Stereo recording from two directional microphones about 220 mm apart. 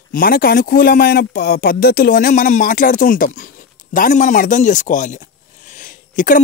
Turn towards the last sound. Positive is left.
turn(degrees=40)  # may be behind; listen again after turning